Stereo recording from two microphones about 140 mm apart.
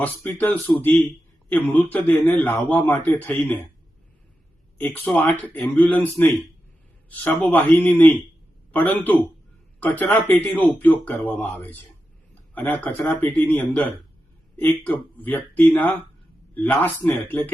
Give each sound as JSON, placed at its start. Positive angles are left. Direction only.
{"t": 0.0, "sound": "a man's voice", "side_deg": 15}
{"t": 4.8, "sound": "a man's voice", "side_deg": 10}
{"t": 7.4, "sound": "a man's voice", "side_deg": 10}